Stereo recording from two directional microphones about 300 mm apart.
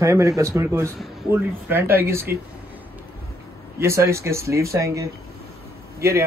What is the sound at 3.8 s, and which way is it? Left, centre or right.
A man's voice, centre.